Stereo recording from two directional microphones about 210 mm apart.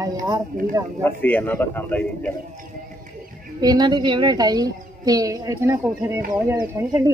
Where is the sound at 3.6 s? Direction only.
20° right (ahead or behind).